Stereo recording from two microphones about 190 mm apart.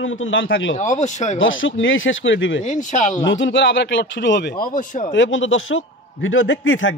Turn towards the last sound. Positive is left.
turn(degrees=90)